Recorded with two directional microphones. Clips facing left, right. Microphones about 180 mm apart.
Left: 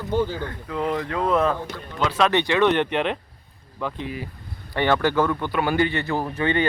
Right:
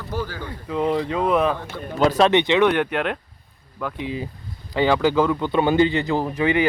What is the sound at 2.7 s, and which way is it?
Speech, 5° right (ahead or behind).